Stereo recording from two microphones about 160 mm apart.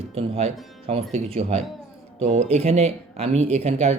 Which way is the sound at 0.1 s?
40° right (ahead or behind).